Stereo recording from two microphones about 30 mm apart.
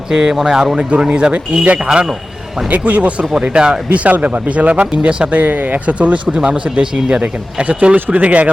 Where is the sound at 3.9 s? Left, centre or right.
Right.